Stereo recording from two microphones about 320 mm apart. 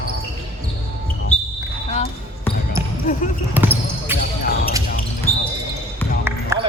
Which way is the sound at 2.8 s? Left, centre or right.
Centre.